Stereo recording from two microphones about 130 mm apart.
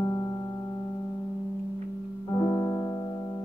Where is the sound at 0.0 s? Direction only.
30° left (ahead or behind).